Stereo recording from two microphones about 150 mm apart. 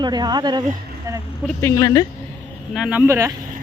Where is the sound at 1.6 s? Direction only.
20° left (ahead or behind).